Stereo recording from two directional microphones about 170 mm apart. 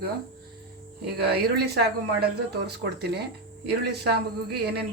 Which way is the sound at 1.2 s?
70° right (ahead or behind).